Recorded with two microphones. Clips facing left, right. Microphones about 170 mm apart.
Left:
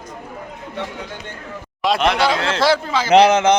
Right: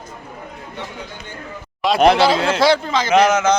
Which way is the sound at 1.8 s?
Centre (ahead or behind).